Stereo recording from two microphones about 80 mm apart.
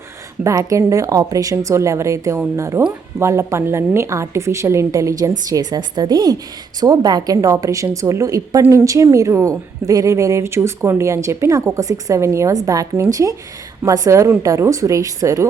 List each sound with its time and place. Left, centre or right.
0.4 s a woman's voice: right